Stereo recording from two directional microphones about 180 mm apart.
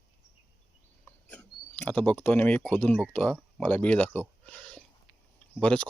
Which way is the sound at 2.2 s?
10° left (ahead or behind).